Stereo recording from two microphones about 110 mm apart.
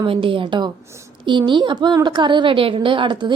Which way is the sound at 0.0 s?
50° right (ahead or behind).